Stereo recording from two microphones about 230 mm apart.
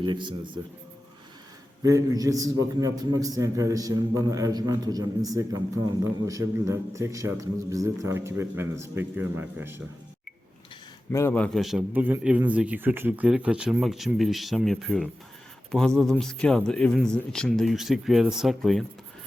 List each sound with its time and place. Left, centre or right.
0.0 s a man's voice: centre
1.8 s a man's voice: centre
11.1 s a man's voice: centre